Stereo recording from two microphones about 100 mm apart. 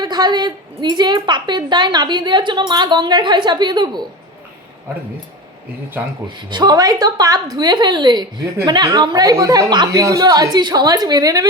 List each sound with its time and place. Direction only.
0.0 s a woman's voice: 45° right (ahead or behind)
6.2 s a woman's voice: 45° right (ahead or behind)
9.9 s speech: 35° right (ahead or behind)